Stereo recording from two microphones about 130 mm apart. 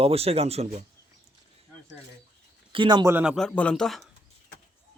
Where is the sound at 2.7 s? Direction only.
35° right (ahead or behind).